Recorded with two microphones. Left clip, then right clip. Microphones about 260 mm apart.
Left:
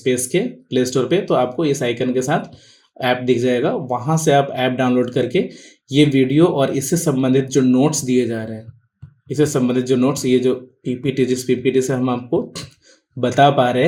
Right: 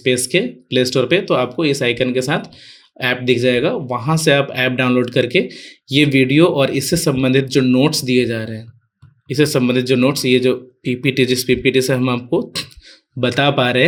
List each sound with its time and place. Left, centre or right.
0.0 s speech: right